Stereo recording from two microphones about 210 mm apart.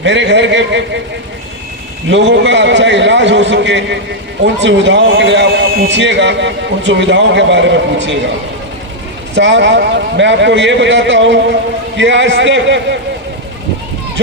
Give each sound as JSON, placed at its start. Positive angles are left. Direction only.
{"t": 0.0, "sound": "a man's voice", "side_deg": -55}
{"t": 2.0, "sound": "a man's voice", "side_deg": -55}
{"t": 9.3, "sound": "a man's voice", "side_deg": -60}